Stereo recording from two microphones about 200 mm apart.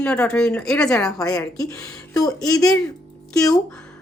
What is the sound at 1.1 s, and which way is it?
Speech, 20° left (ahead or behind).